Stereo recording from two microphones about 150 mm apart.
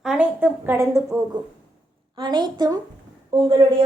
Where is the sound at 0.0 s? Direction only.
5° right (ahead or behind).